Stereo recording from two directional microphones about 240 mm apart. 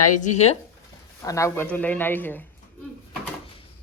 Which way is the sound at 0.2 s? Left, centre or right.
Left.